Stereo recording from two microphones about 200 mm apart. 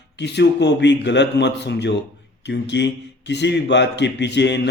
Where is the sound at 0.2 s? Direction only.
60° left (ahead or behind).